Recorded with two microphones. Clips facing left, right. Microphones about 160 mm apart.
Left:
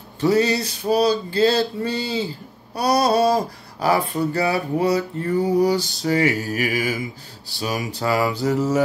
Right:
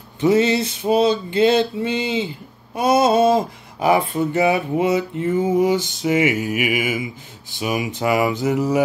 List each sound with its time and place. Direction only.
0.2 s male singing: 20° right (ahead or behind)